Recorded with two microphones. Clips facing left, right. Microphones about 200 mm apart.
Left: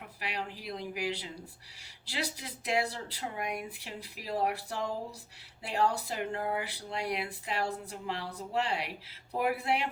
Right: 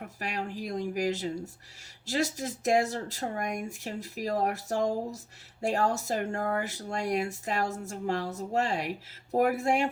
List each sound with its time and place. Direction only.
0.0 s speech: 45° right (ahead or behind)